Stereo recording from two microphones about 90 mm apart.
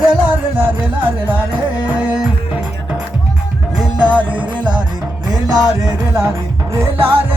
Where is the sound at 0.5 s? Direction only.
20° right (ahead or behind).